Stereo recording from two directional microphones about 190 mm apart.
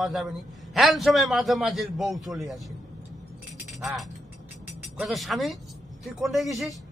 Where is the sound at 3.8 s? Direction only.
Centre (ahead or behind).